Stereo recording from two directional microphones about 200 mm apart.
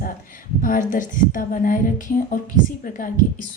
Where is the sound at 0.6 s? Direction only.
40° left (ahead or behind).